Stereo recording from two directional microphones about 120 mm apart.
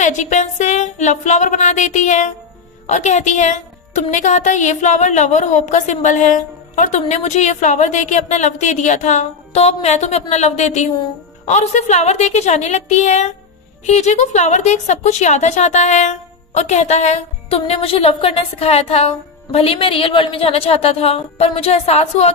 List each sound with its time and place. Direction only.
0.0 s speech: 90° left
2.9 s a woman's voice: 80° left
17.6 s a woman's voice: 50° left (ahead or behind)